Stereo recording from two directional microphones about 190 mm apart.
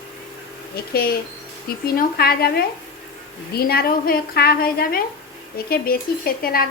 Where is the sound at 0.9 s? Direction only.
55° left (ahead or behind).